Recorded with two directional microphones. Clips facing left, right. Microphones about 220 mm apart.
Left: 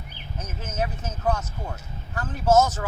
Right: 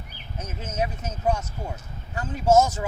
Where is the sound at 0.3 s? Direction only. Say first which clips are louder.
Right 1 dB; 15° right (ahead or behind).